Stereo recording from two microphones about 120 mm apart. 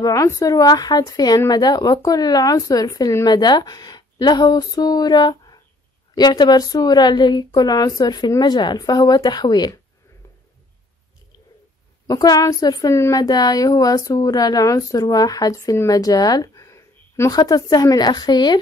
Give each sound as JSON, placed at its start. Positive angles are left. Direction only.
{"t": 0.0, "sound": "a woman's voice", "side_deg": 30}
{"t": 12.1, "sound": "a woman's voice", "side_deg": 30}
{"t": 13.2, "sound": "a woman's voice", "side_deg": 35}